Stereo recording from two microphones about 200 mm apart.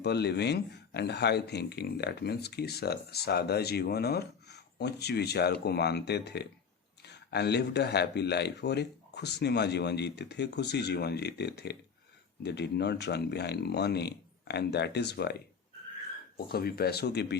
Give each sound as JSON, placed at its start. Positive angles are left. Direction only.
{"t": 0.0, "sound": "speech", "side_deg": 55}
{"t": 16.5, "sound": "speech", "side_deg": 50}